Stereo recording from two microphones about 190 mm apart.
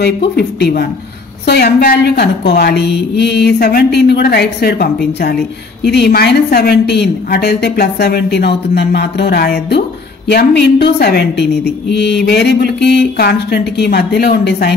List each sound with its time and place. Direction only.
0.2 s a woman's voice: 60° left (ahead or behind)